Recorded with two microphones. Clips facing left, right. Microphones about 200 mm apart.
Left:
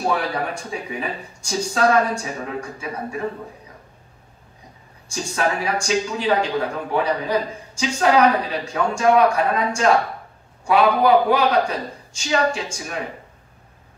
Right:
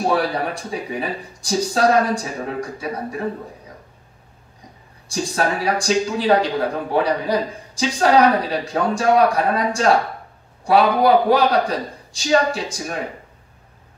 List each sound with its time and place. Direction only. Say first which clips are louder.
0.1 s a man's voice: right 3 dB; 35° right (ahead or behind)
5.1 s a man's voice: right 2 dB; 35° right (ahead or behind)